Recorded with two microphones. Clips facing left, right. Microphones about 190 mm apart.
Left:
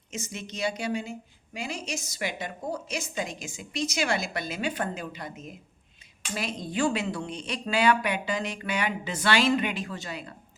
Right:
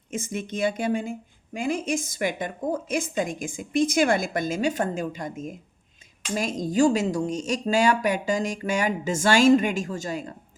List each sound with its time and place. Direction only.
0.1 s a woman's voice: 50° right (ahead or behind)